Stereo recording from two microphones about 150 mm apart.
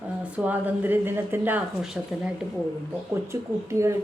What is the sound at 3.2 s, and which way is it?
Speech, 20° right (ahead or behind).